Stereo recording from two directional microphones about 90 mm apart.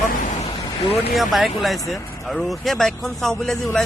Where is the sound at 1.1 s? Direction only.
Centre (ahead or behind).